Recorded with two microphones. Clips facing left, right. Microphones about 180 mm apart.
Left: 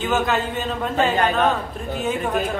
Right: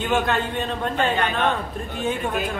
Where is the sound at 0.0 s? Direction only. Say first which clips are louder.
Left 1 dB; centre (ahead or behind).